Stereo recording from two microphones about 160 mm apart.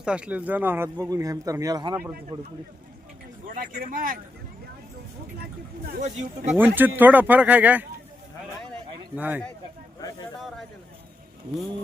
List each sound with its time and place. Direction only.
0.0 s a man's voice: 5° right (ahead or behind); by 2.5 s 30° right (ahead or behind)
3.4 s a sound: 55° right (ahead or behind)
3.8 s speech: 60° right (ahead or behind)
6.0 s speech: 45° right (ahead or behind)
6.7 s speech: 10° right (ahead or behind)
9.1 s speech: 10° right (ahead or behind)